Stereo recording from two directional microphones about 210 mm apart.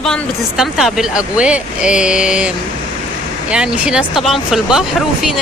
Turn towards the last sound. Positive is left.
turn(degrees=0)  # may be behind; listen again after turning